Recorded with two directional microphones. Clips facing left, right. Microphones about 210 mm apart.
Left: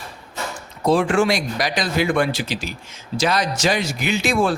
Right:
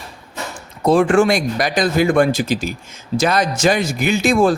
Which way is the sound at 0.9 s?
50° right (ahead or behind).